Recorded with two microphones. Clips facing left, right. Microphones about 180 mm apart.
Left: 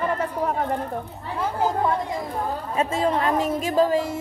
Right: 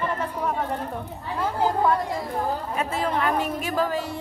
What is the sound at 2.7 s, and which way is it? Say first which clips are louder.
Speech: left 6 dB; 25° left (ahead or behind).